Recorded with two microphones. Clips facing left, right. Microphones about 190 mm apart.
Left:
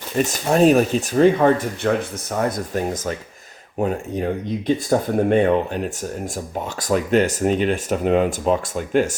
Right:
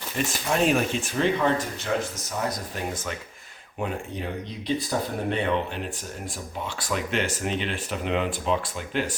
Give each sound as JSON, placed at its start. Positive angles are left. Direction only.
{"t": 0.3, "sound": "speech", "side_deg": 40}